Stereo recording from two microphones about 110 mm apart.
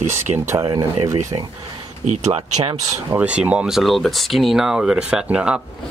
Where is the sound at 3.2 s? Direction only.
10° right (ahead or behind).